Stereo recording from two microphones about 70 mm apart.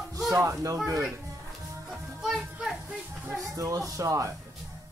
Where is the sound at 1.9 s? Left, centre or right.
Centre.